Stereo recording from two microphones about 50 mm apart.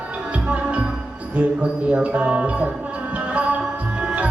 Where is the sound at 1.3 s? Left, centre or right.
Right.